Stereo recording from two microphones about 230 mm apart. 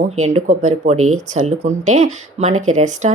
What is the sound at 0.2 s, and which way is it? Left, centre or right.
Speech, right.